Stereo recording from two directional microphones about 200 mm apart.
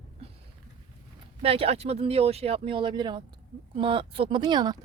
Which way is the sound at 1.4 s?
30° right (ahead or behind).